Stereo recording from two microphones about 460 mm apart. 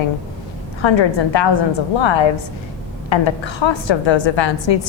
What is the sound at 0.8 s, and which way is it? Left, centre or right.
A woman's voice, left.